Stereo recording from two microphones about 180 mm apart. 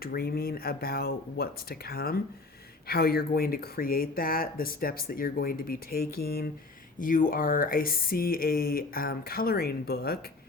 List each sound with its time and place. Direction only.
0.0 s speech: 60° left (ahead or behind)